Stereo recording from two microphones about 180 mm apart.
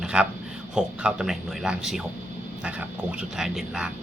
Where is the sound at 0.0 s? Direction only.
5° right (ahead or behind).